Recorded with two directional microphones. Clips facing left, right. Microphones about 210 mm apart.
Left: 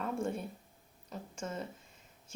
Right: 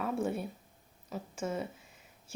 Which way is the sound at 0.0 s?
5° right (ahead or behind).